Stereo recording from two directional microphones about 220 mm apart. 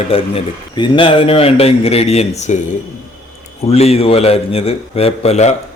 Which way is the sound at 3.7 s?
30° left (ahead or behind).